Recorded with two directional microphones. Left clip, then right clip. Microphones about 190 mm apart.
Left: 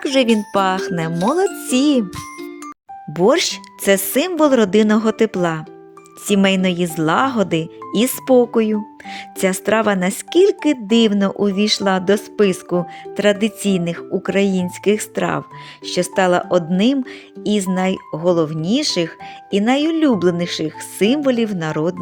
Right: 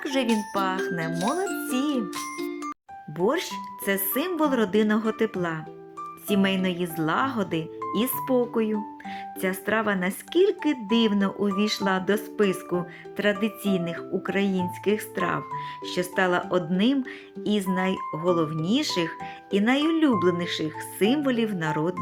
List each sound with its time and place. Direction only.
0.0 s music: 35° left (ahead or behind)
0.5 s speech: 40° left (ahead or behind)
1.1 s speech: centre (ahead or behind)
1.5 s music: centre (ahead or behind)
1.7 s speech: 40° left (ahead or behind)
2.0 s music: centre (ahead or behind)
3.2 s speech: 40° left (ahead or behind)